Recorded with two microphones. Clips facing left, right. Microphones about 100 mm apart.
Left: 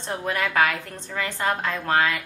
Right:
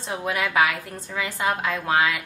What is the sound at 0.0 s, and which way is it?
A woman's voice, 5° right (ahead or behind).